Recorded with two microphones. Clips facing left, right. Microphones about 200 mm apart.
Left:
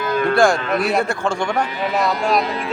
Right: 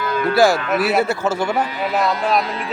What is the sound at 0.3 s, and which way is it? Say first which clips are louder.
A man's voice: right 2 dB; 5° right (ahead or behind).